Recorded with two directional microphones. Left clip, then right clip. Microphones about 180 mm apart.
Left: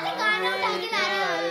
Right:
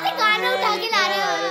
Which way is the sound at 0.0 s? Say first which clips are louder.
Right 5 dB; 75° right (ahead or behind).